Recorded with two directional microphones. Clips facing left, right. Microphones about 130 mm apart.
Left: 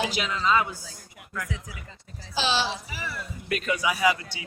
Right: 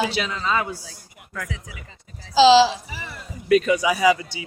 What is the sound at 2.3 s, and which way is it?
Speech, 90° right.